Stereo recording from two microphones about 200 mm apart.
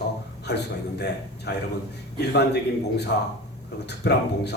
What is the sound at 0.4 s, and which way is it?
A man's voice, 55° left (ahead or behind).